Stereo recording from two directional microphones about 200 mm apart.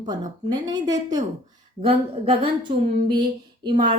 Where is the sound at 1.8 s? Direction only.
30° right (ahead or behind).